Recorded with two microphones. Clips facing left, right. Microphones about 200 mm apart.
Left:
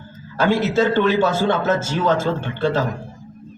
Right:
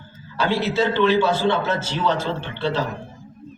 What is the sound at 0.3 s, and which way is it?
A man's voice, 50° left (ahead or behind).